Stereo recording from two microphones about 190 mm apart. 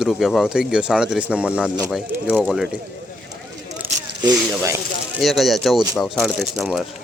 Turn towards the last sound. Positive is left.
turn(degrees=0)  # may be behind; listen again after turning